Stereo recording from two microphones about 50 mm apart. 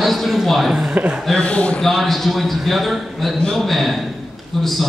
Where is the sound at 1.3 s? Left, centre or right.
Left.